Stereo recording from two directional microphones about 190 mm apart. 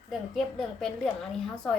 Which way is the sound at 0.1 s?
Centre (ahead or behind).